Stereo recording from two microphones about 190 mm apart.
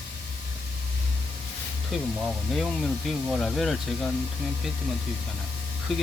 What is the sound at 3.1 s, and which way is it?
Speech, centre (ahead or behind).